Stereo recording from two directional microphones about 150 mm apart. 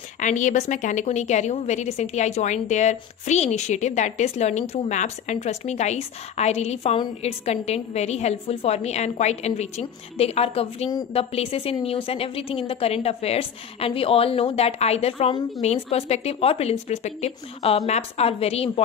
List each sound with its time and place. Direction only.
0.2 s a woman's voice: 55° left (ahead or behind)